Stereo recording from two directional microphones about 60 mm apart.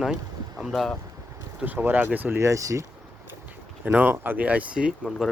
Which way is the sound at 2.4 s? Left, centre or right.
Right.